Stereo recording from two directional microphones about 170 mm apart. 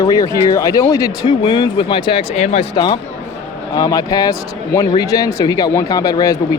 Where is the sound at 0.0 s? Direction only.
20° left (ahead or behind); by 2.6 s 40° left (ahead or behind).